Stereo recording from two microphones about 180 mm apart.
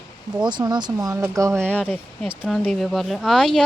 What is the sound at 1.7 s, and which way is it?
Speech, 10° left (ahead or behind).